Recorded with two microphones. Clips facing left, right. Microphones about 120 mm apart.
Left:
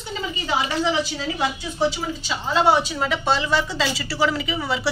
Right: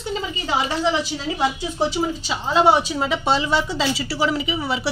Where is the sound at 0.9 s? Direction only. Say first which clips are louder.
Right 1 dB; 35° right (ahead or behind).